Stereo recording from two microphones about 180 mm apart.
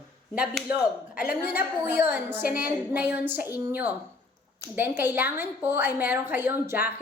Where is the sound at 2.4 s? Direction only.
55° left (ahead or behind).